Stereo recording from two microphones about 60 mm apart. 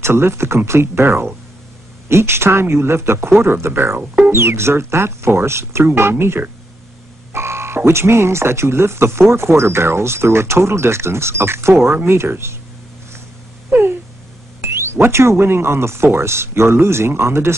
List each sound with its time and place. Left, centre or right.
0.0 s speech: right
4.0 s speech: right
4.3 s speech: right
13.7 s a sound: right
14.6 s speech: right